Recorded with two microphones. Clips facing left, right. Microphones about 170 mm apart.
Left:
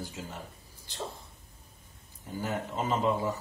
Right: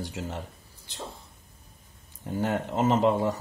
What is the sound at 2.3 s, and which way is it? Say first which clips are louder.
Speech: right 6 dB; 75° right (ahead or behind).